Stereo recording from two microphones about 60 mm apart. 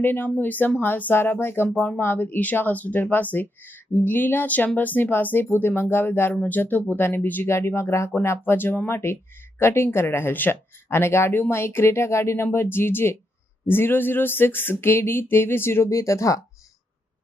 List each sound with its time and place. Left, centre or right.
0.0 s speech: left
7.5 s speech: left
8.4 s speech: left